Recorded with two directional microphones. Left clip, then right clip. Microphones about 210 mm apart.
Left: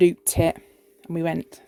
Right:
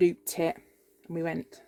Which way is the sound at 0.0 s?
40° left (ahead or behind).